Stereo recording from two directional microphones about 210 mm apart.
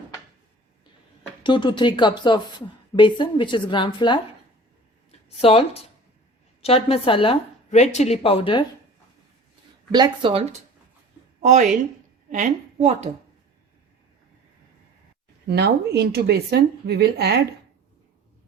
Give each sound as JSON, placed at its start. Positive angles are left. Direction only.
{"t": 1.5, "sound": "a woman's voice", "side_deg": 20}
{"t": 5.4, "sound": "a woman's voice", "side_deg": 25}
{"t": 9.9, "sound": "speech", "side_deg": -20}
{"t": 11.3, "sound": "a woman's voice", "side_deg": -35}
{"t": 15.4, "sound": "a woman's voice", "side_deg": -50}